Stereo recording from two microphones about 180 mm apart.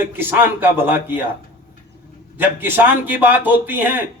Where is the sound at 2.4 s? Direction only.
10° right (ahead or behind).